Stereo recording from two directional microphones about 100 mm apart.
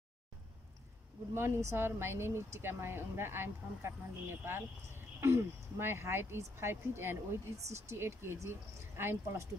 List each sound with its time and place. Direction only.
1.3 s speech: 25° right (ahead or behind)